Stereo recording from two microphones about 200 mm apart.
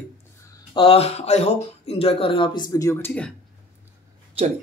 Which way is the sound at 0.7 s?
30° left (ahead or behind).